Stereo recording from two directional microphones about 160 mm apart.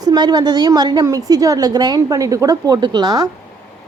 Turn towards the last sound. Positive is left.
turn(degrees=-25)  # may be behind; listen again after turning